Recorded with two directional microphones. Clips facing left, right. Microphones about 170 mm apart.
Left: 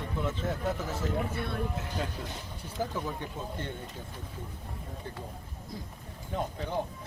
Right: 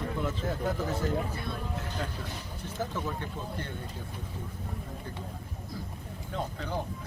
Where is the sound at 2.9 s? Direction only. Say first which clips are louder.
Even; 15° left (ahead or behind).